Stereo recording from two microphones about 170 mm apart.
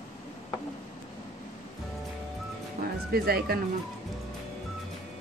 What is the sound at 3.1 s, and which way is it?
Speech, 65° right (ahead or behind).